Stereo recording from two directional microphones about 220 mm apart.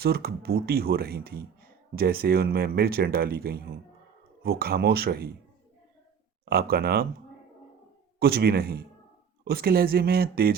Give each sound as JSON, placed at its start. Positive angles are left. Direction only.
{"t": 0.0, "sound": "speech", "side_deg": -45}
{"t": 6.4, "sound": "speech", "side_deg": -45}
{"t": 8.2, "sound": "speech", "side_deg": -45}